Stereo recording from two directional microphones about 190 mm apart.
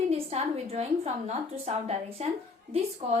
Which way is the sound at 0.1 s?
35° right (ahead or behind).